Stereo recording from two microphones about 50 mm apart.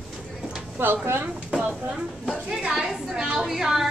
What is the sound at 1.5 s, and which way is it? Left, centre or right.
Speech, right.